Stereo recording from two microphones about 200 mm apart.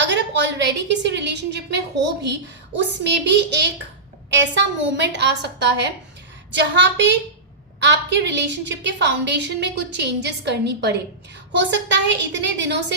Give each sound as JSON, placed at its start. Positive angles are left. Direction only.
{"t": 0.0, "sound": "a woman's voice", "side_deg": -60}